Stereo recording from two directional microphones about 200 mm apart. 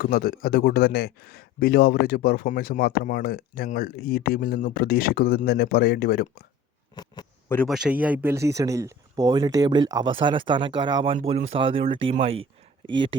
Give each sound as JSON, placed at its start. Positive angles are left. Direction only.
{"t": 0.0, "sound": "a man's voice", "side_deg": 50}
{"t": 6.9, "sound": "speech", "side_deg": 20}
{"t": 7.4, "sound": "a sound", "side_deg": 10}
{"t": 7.7, "sound": "speech", "side_deg": -5}